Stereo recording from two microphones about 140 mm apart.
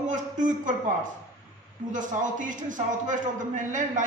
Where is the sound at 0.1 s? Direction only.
65° right (ahead or behind).